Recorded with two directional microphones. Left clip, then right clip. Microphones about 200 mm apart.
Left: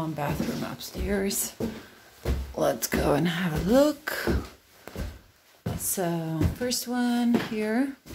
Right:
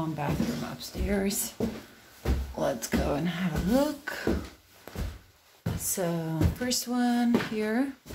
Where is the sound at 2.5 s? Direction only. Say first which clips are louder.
Left 4 dB; 15° left (ahead or behind).